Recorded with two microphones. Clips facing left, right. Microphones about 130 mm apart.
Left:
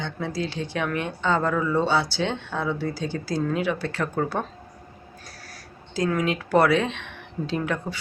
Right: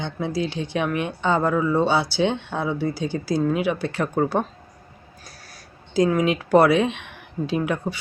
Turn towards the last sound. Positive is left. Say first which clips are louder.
# right 3 dB
turn(degrees=-10)  # may be behind; listen again after turning